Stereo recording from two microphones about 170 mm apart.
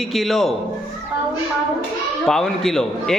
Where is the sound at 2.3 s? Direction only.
5° left (ahead or behind).